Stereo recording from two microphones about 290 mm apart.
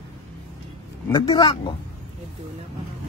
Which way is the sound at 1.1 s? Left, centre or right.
Centre.